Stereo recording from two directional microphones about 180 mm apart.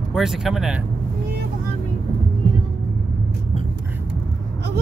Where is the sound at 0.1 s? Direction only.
Centre (ahead or behind).